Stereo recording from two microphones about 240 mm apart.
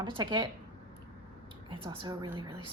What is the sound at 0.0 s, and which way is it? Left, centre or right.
Speech, centre.